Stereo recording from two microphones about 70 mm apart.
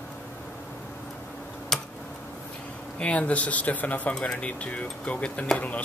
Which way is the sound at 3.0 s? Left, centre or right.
Centre.